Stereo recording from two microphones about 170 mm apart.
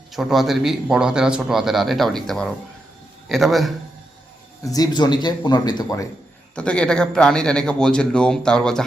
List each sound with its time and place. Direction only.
0.1 s speech: centre (ahead or behind)
4.6 s speech: 20° left (ahead or behind)
6.6 s speech: 5° left (ahead or behind)